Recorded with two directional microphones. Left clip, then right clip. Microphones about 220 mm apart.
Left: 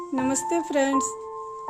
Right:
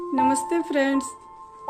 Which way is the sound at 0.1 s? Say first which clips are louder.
Right 4 dB; 35° left (ahead or behind).